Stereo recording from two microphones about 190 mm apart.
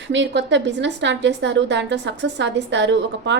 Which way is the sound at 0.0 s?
70° right (ahead or behind).